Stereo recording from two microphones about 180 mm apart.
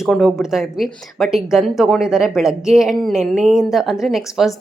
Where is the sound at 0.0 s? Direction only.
Centre (ahead or behind).